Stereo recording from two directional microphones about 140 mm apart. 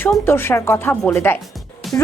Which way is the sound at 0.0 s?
15° left (ahead or behind).